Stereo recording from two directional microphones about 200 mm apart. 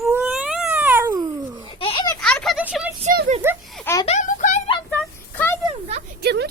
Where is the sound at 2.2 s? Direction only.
5° left (ahead or behind).